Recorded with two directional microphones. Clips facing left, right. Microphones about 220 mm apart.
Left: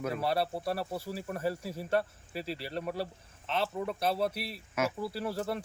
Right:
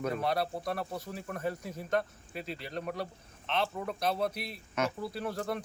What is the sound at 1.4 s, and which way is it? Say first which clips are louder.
Speech: left 1 dB; 30° left (ahead or behind).